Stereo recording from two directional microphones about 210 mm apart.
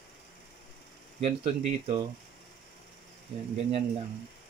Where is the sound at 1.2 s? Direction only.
25° right (ahead or behind).